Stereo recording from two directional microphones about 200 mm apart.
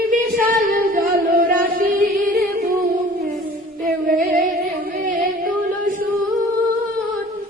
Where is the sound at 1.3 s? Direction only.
45° right (ahead or behind).